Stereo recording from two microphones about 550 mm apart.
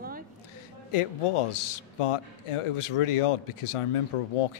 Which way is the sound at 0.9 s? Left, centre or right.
Left.